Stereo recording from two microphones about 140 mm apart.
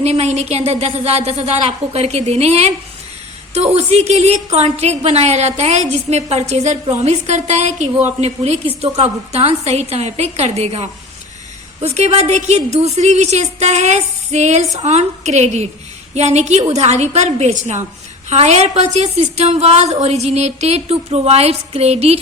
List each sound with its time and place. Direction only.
0.0 s a woman's voice: 50° right (ahead or behind)